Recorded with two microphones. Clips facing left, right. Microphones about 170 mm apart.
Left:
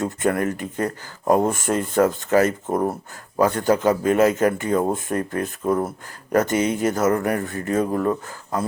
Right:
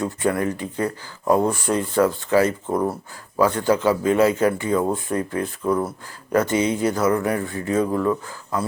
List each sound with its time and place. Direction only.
0.0 s speech: 50° left (ahead or behind)